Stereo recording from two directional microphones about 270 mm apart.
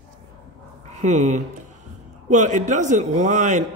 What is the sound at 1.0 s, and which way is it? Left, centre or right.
Speech, right.